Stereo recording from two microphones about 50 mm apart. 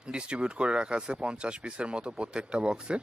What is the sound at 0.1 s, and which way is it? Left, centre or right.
Speech, centre.